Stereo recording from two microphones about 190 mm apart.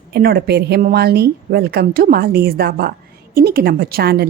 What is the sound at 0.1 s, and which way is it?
Speech, 55° right (ahead or behind).